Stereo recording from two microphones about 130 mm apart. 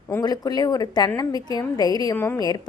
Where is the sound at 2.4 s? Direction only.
30° left (ahead or behind).